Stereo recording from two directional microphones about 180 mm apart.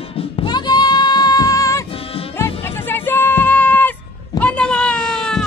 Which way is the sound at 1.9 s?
30° left (ahead or behind).